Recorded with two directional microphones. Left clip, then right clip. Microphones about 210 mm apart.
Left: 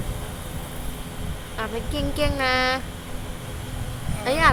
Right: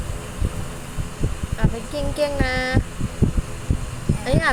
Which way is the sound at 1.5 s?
Centre (ahead or behind).